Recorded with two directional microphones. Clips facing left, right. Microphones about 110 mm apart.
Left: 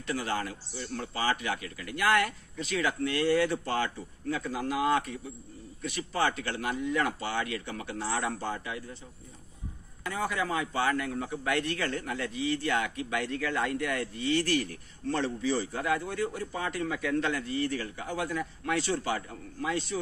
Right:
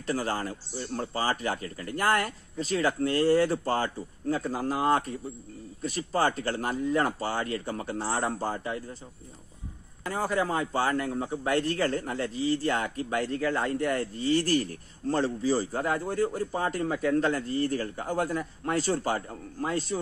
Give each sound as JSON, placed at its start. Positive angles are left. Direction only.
{"t": 0.0, "sound": "a man's voice", "side_deg": -40}
{"t": 10.1, "sound": "a man's voice", "side_deg": -35}